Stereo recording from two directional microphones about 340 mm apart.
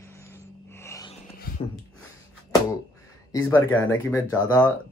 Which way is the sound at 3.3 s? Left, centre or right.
Centre.